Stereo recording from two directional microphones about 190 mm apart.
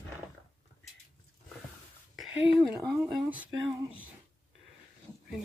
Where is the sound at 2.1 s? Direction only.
Centre (ahead or behind).